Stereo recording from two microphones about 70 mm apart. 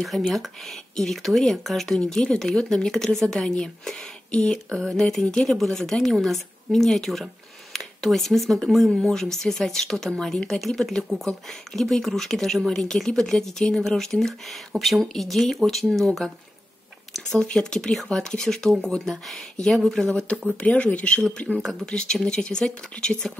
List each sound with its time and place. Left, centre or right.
0.0 s speech: centre